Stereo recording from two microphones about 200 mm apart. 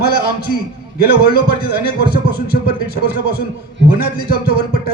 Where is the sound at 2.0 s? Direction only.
50° left (ahead or behind).